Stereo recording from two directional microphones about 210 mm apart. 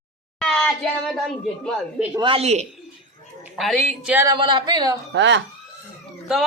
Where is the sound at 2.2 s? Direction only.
25° right (ahead or behind).